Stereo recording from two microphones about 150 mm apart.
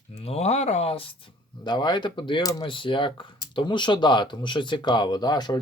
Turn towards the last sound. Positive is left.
turn(degrees=30)  # may be behind; listen again after turning